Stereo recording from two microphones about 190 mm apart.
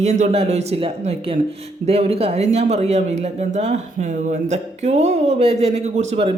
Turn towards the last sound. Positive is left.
turn(degrees=-30)  # may be behind; listen again after turning